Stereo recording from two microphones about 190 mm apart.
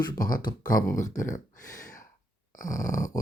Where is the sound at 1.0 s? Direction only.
40° left (ahead or behind).